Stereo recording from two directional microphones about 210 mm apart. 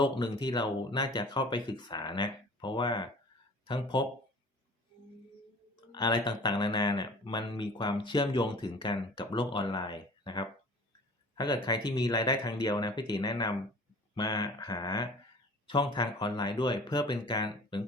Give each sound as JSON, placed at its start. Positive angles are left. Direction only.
{"t": 0.0, "sound": "speech", "side_deg": 20}
{"t": 5.9, "sound": "speech", "side_deg": 20}